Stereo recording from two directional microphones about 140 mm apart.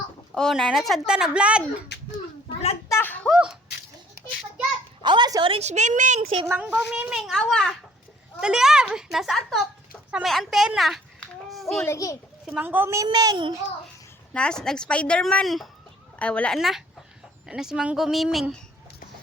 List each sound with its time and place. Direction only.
0.3 s speech: centre (ahead or behind)
2.9 s a sound: 15° left (ahead or behind)
3.2 s a sound: 5° right (ahead or behind)
5.0 s a woman's voice: 30° right (ahead or behind); by 6.4 s 55° right (ahead or behind)
6.4 s speech: 15° right (ahead or behind)
10.3 s a sound: centre (ahead or behind)
11.8 s a child's voice: 20° left (ahead or behind)
12.5 s a woman's voice: 10° right (ahead or behind); by 13.5 s 30° right (ahead or behind)
14.3 s a woman's voice: 5° left (ahead or behind)